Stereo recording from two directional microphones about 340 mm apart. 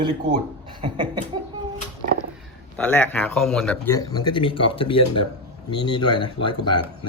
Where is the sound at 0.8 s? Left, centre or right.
Centre.